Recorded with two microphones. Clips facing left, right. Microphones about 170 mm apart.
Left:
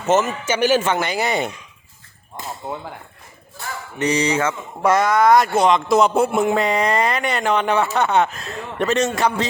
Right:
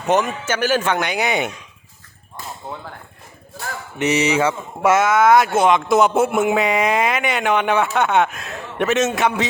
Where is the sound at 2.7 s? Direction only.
20° left (ahead or behind).